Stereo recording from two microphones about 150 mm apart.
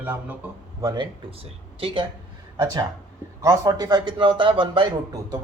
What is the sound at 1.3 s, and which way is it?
Speech, 40° right (ahead or behind).